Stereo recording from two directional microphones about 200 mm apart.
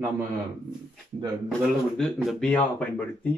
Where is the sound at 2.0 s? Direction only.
5° left (ahead or behind).